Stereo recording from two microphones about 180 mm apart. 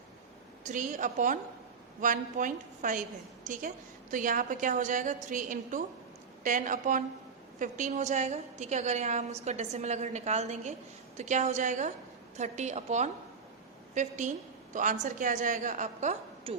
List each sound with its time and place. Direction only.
0.7 s a woman's voice: 45° right (ahead or behind)